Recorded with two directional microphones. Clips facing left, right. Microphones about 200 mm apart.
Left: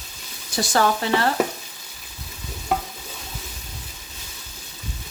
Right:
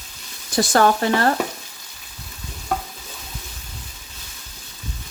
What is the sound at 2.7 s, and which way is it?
Stir, 5° left (ahead or behind).